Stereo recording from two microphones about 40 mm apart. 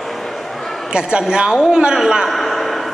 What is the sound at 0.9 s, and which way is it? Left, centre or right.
A woman's voice, right.